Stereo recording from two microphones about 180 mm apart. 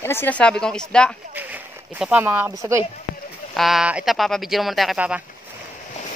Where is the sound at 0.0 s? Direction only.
10° left (ahead or behind).